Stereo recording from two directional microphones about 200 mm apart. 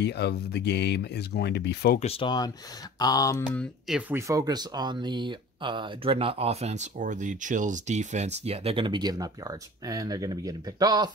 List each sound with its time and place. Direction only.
0.0 s speech: 55° left (ahead or behind)
2.0 s speech: 30° left (ahead or behind)
3.0 s a sound: 20° left (ahead or behind)
3.5 s speech: centre (ahead or behind)
4.3 s speech: 20° right (ahead or behind)